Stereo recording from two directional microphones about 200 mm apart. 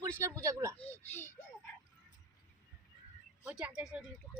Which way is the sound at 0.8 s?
10° left (ahead or behind).